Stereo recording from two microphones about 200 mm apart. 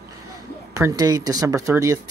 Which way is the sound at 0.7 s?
15° right (ahead or behind).